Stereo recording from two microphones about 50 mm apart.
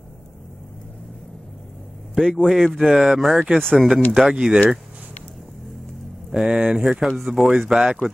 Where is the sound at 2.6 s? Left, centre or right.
Centre.